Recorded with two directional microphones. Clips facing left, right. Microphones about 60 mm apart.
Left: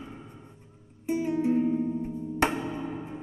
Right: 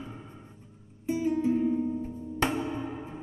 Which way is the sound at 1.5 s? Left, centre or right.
Centre.